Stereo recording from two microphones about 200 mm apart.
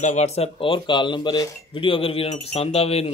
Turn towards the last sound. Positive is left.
turn(degrees=30)  # may be behind; listen again after turning